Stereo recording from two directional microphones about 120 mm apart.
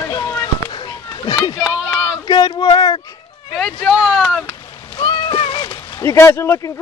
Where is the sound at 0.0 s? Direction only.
30° left (ahead or behind).